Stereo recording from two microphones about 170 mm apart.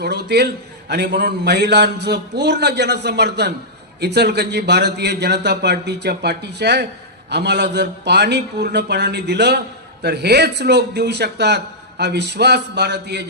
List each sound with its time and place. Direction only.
0.0 s a man's voice: 75° right (ahead or behind)